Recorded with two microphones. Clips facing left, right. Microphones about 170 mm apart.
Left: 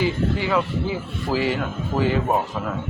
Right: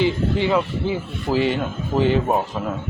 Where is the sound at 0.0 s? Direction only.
20° right (ahead or behind).